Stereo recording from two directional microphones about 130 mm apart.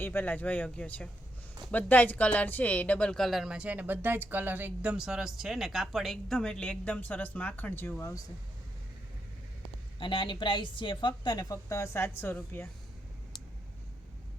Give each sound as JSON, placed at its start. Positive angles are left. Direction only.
{"t": 0.0, "sound": "speech", "side_deg": 15}
{"t": 10.0, "sound": "a woman's voice", "side_deg": 40}